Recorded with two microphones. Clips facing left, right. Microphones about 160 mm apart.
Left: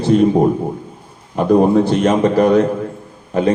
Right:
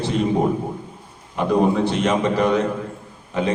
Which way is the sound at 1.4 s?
45° left (ahead or behind).